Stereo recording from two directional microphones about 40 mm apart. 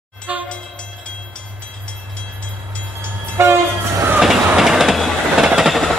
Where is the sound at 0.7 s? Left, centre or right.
Left.